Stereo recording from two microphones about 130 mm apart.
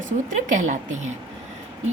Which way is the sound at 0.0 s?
75° right (ahead or behind).